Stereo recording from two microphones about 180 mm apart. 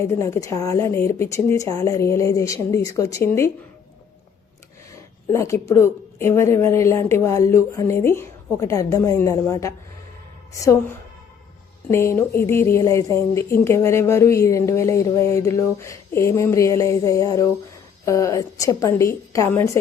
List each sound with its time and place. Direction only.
0.1 s speech: 15° left (ahead or behind)
5.3 s speech: 15° left (ahead or behind)